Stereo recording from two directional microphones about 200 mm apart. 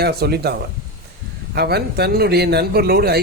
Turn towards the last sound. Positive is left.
turn(degrees=-55)  # may be behind; listen again after turning